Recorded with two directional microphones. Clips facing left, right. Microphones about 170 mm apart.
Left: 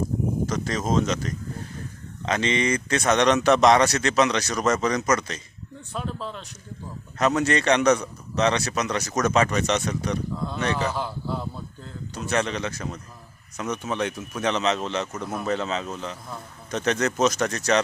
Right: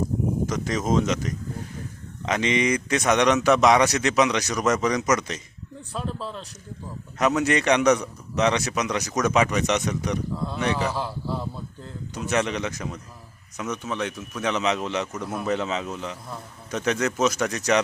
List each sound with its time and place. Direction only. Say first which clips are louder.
0.4 s a man's voice: right 1 dB; 15° right (ahead or behind)
5.9 s speech: even; centre (ahead or behind)
7.2 s a man's voice: even; 10° right (ahead or behind)
10.3 s a sound: right 1 dB; 5° right (ahead or behind)
10.6 s a man's voice: right 1 dB; 15° right (ahead or behind)
10.9 s speech: even; 5° right (ahead or behind)
12.1 s a man's voice: right 1 dB; 15° right (ahead or behind)
13.6 s speech: left 1 dB; centre (ahead or behind)
14.5 s a man's voice: right 1 dB; 15° right (ahead or behind)